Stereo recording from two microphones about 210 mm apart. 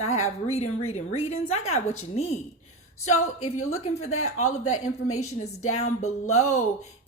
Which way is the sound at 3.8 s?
30° left (ahead or behind).